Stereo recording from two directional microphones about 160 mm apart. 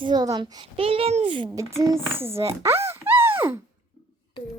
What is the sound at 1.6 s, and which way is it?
A child's voice, 15° right (ahead or behind).